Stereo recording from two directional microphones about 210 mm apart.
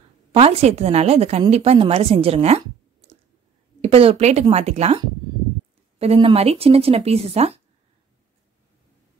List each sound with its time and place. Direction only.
0.3 s a woman's voice: 30° right (ahead or behind)